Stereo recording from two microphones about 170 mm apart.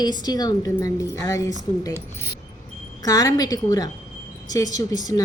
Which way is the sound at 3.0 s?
20° left (ahead or behind).